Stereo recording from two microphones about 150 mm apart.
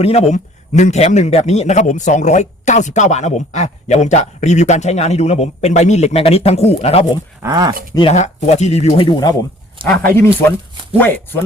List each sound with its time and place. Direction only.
0.0 s a man's voice: 45° left (ahead or behind)
7.4 s speech: 20° right (ahead or behind)
8.1 s a man's voice: 50° left (ahead or behind)
8.9 s speech: 30° left (ahead or behind)
9.8 s speech: 10° left (ahead or behind)